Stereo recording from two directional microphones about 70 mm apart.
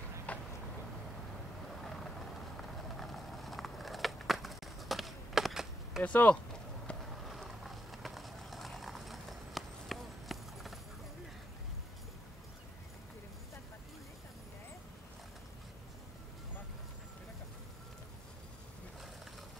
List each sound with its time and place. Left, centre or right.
0.3 s vehicle: centre
1.8 s vehicle: centre
3.0 s a sound: centre
6.0 s speech: left
7.0 s vehicle: centre